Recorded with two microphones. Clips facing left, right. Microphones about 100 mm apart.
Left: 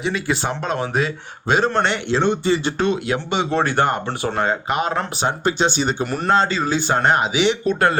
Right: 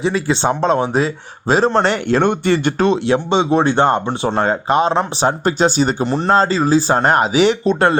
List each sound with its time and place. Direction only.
0.0 s a man's voice: 30° right (ahead or behind); by 2.7 s 55° right (ahead or behind)
2.7 s a man's voice: 35° right (ahead or behind)
5.5 s a man's voice: 40° right (ahead or behind)
7.6 s speech: 30° right (ahead or behind)